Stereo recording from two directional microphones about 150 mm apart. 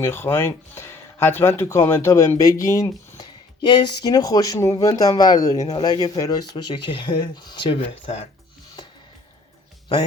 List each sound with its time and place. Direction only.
0.0 s speech: 15° left (ahead or behind)
5.5 s speech: 45° left (ahead or behind)
5.8 s speech: 25° left (ahead or behind)